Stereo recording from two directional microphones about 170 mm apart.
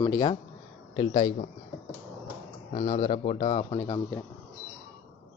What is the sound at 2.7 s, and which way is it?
Speech, 45° left (ahead or behind).